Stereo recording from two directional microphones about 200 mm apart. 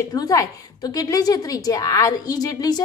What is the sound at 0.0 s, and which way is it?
A woman's voice, 20° left (ahead or behind).